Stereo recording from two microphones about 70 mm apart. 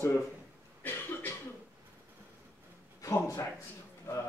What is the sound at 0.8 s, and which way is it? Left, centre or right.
Cough, left.